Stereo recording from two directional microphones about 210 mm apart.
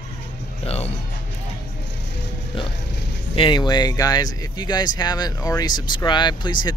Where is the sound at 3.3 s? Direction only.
20° left (ahead or behind).